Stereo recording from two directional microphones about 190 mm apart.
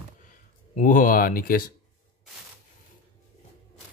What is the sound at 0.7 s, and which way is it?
Speech, 45° left (ahead or behind).